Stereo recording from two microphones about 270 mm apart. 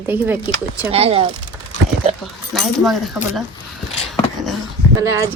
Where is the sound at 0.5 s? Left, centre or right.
Centre.